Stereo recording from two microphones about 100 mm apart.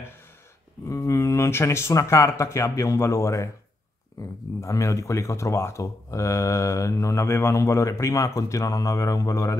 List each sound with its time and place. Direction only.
0.8 s speech: 30° left (ahead or behind)